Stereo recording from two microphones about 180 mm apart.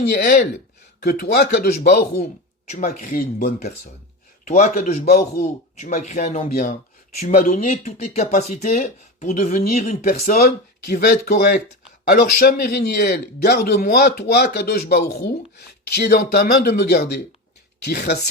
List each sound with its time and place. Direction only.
0.0 s speech: 65° left (ahead or behind)
2.6 s speech: 45° left (ahead or behind)
4.4 s speech: 45° left (ahead or behind)
5.0 s speech: 55° left (ahead or behind)
5.4 s speech: 40° left (ahead or behind)
8.7 s speech: 50° left (ahead or behind)
10.2 s speech: 50° left (ahead or behind)